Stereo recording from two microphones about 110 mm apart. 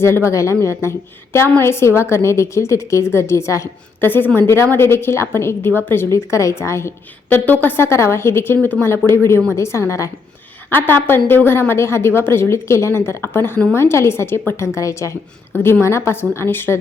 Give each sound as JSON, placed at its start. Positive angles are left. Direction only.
{"t": 0.0, "sound": "a woman's voice", "side_deg": 25}